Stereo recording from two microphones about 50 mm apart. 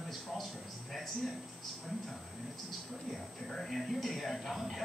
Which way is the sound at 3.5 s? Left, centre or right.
Centre.